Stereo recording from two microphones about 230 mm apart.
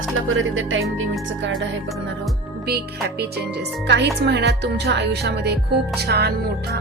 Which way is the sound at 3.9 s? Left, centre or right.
Right.